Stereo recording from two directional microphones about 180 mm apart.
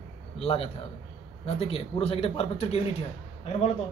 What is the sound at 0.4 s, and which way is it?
A man's voice, 35° left (ahead or behind).